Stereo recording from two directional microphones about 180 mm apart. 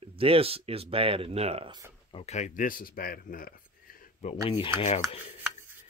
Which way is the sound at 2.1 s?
35° left (ahead or behind).